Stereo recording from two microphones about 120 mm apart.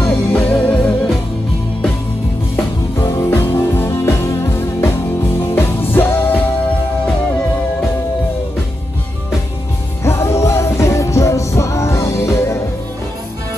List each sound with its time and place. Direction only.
0.3 s music: 10° left (ahead or behind)
2.5 s music: 20° left (ahead or behind)
10.0 s music: 25° left (ahead or behind)